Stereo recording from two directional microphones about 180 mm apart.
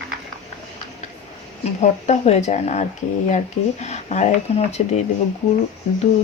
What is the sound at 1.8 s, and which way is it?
Speech, 40° left (ahead or behind).